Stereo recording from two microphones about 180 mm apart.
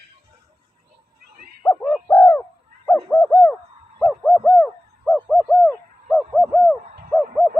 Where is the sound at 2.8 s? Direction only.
5° left (ahead or behind).